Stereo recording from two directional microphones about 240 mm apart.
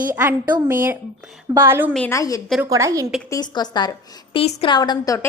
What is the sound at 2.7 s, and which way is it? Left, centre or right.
Speech, centre.